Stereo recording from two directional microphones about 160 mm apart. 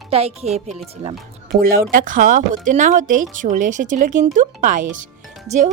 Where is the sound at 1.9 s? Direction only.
60° right (ahead or behind).